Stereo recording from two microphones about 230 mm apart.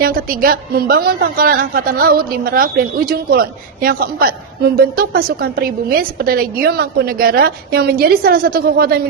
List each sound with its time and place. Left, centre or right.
0.0 s a woman's voice: right